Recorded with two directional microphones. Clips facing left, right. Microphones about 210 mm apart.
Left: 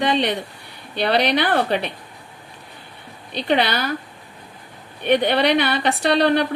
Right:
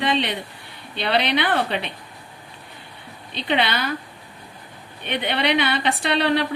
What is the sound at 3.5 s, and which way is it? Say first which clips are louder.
Speech: left 3 dB; 40° left (ahead or behind).